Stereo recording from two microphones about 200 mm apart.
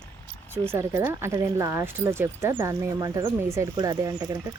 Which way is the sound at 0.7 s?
15° right (ahead or behind).